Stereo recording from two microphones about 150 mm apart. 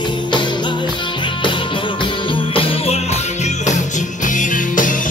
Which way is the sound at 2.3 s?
35° left (ahead or behind).